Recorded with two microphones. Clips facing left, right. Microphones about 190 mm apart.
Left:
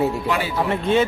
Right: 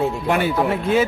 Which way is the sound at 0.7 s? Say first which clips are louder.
Left 4 dB; 5° right (ahead or behind).